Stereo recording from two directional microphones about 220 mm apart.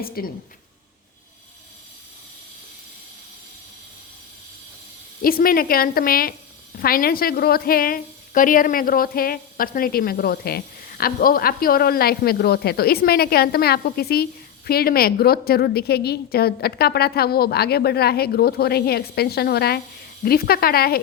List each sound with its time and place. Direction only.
0.2 s a woman's voice: 45° left (ahead or behind)
5.2 s a woman's voice: 40° left (ahead or behind)